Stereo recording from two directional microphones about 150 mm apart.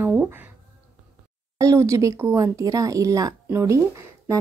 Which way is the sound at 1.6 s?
20° right (ahead or behind).